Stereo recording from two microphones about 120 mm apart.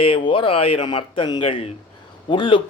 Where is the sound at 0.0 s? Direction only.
45° left (ahead or behind).